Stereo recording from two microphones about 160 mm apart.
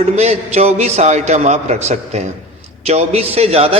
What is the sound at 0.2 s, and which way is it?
A man's voice, 40° right (ahead or behind).